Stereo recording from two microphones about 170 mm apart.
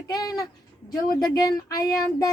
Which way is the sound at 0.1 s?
20° left (ahead or behind).